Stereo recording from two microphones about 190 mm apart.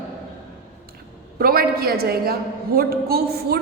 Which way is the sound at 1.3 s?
50° right (ahead or behind).